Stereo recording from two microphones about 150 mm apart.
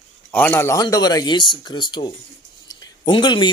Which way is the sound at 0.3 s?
10° left (ahead or behind).